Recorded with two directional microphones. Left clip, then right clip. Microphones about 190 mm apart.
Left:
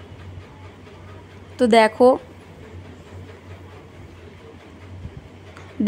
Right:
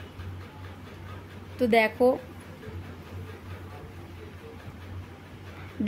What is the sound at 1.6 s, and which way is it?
Speech, 35° left (ahead or behind).